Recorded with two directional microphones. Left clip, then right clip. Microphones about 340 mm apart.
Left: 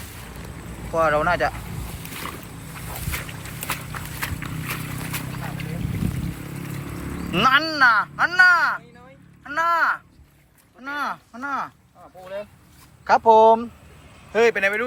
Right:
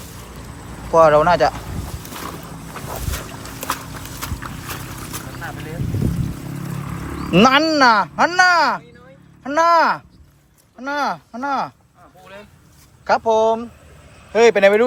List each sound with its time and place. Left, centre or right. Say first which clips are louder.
0.9 s speech: right 8 dB; centre
7.3 s speech: right 5 dB; centre
13.1 s speech: left 2 dB; centre
14.3 s speech: right 7 dB; centre